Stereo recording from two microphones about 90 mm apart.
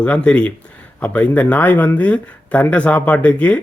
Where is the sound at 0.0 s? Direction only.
10° left (ahead or behind).